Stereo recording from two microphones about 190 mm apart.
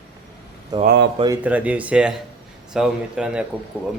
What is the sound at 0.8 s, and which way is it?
Speech, 65° right (ahead or behind).